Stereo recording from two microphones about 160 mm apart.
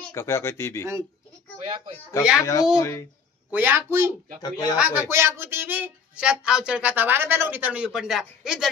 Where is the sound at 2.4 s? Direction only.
20° left (ahead or behind).